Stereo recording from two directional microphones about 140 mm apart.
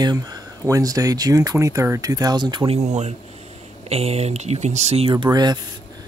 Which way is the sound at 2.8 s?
55° right (ahead or behind).